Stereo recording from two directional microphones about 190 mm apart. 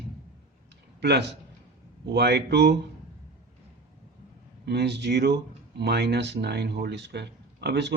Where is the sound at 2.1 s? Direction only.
60° right (ahead or behind).